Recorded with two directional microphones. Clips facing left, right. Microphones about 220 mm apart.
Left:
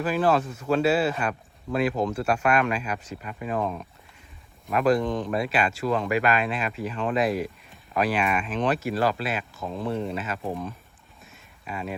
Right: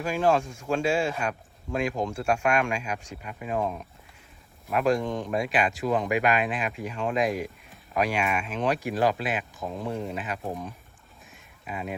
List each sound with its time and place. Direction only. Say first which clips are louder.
0.0 s speech: left 1 dB; 10° right (ahead or behind)
4.6 s speech: left 2 dB; 5° right (ahead or behind)
9.9 s speech: left 3 dB; centre (ahead or behind)
10.2 s speech: left 2 dB; 15° right (ahead or behind)
11.3 s a sound: left 1 dB; centre (ahead or behind)